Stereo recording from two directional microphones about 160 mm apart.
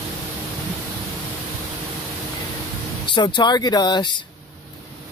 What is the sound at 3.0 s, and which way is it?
Speech, 30° left (ahead or behind).